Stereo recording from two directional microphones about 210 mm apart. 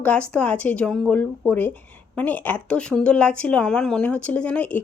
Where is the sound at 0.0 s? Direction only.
5° left (ahead or behind).